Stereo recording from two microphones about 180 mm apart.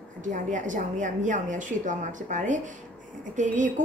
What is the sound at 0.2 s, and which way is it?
Speech, 45° right (ahead or behind).